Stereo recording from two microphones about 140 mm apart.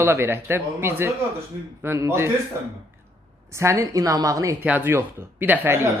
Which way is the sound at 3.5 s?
20° right (ahead or behind).